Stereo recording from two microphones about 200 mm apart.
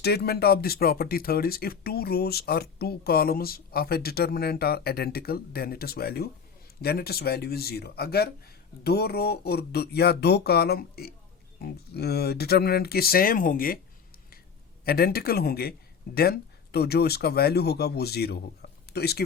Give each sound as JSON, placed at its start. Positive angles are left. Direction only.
{"t": 0.0, "sound": "speech", "side_deg": 55}
{"t": 14.8, "sound": "speech", "side_deg": 50}